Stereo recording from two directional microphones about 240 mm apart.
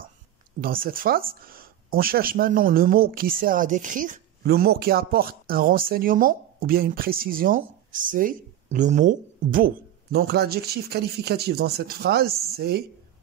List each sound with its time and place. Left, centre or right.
0.6 s speech: right